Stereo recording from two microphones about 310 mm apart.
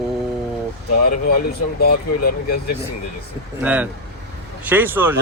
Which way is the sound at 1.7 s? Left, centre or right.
Left.